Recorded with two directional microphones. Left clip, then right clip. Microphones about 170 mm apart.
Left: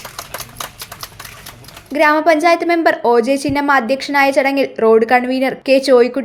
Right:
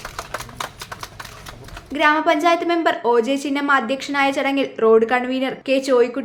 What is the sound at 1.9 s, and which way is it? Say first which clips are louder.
A woman's voice: left 5 dB; 30° left (ahead or behind).